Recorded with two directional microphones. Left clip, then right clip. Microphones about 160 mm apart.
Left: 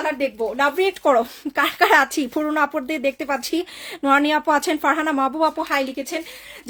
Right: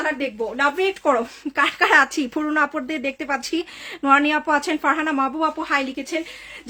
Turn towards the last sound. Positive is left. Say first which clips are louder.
# even
turn(degrees=35)  # may be behind; listen again after turning